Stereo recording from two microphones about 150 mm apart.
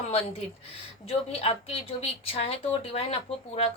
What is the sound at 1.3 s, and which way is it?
A woman's voice, 40° left (ahead or behind).